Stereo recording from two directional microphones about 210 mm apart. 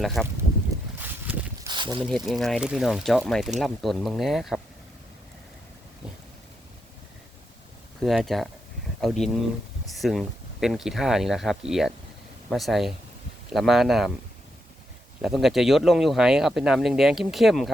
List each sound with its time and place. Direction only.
0.0 s speech: centre (ahead or behind)
0.9 s a sound: 10° right (ahead or behind)
1.7 s a sound: 20° right (ahead or behind)
2.0 s speech: centre (ahead or behind)
8.0 s speech: centre (ahead or behind)
15.2 s speech: centre (ahead or behind)